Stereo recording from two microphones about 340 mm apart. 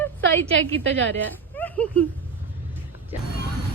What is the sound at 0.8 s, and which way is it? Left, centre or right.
Speech, right.